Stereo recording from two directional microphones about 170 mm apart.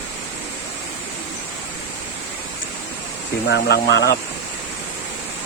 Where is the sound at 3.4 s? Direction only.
85° left.